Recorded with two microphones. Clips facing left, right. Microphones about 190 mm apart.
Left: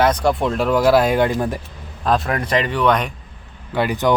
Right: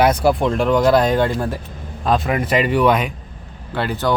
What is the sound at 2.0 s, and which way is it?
Speech, centre (ahead or behind).